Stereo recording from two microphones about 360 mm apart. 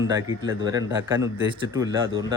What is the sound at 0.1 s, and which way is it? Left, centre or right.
Speech, centre.